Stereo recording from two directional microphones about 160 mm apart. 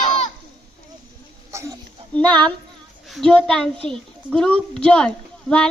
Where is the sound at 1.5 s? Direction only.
15° right (ahead or behind).